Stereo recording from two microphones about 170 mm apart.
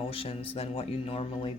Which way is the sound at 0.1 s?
35° left (ahead or behind).